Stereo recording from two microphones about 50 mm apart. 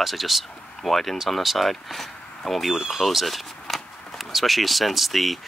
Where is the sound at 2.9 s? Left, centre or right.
Centre.